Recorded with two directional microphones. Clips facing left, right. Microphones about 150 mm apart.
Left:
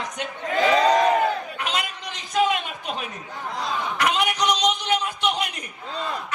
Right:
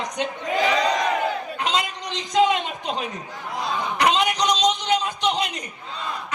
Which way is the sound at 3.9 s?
20° right (ahead or behind).